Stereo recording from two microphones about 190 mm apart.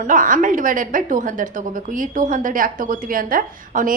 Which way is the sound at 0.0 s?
45° right (ahead or behind).